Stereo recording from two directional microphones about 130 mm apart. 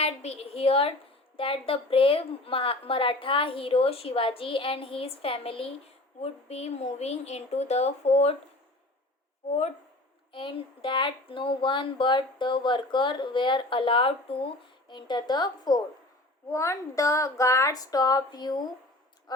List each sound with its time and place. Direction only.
0.0 s a woman's voice: 50° left (ahead or behind)
10.3 s a woman's voice: 40° left (ahead or behind)